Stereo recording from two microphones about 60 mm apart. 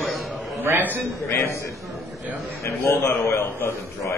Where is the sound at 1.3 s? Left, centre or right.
Left.